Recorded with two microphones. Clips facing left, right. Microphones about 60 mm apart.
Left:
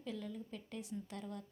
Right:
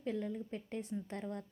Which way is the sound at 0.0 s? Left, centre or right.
Right.